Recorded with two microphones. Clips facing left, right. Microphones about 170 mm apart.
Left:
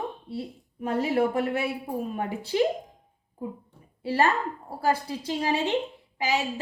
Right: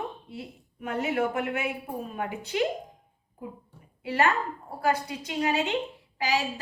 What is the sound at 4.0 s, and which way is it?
A woman's voice, 35° left (ahead or behind).